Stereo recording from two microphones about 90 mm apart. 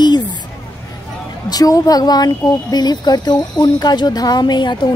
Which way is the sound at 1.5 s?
40° left (ahead or behind).